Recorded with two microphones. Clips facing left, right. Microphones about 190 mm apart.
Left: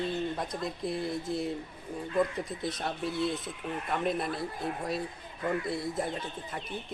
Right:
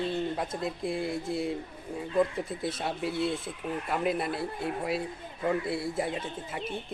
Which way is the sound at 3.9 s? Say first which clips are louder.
Right 1 dB; 5° right (ahead or behind).